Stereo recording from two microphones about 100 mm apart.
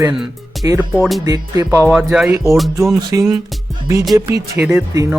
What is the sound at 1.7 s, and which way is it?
Speech, 15° right (ahead or behind).